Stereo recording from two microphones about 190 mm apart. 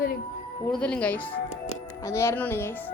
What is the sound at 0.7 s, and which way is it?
A woman's voice, 5° left (ahead or behind).